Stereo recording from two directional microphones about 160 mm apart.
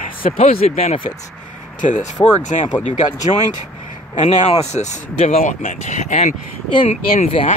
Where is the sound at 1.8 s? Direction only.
50° left (ahead or behind).